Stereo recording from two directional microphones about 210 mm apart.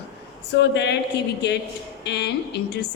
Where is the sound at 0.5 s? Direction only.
55° left (ahead or behind).